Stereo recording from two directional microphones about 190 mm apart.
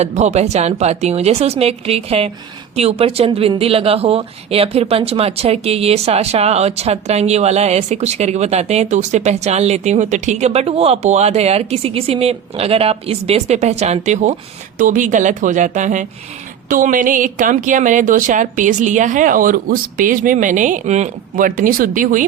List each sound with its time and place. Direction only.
0.0 s speech: 35° right (ahead or behind)